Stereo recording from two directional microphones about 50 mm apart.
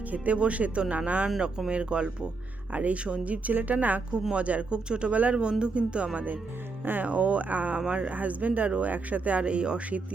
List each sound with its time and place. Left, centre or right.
0.1 s speech: right
1.4 s speech: centre
6.8 s speech: right